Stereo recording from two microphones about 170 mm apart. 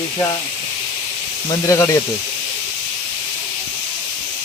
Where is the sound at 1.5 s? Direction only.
20° left (ahead or behind).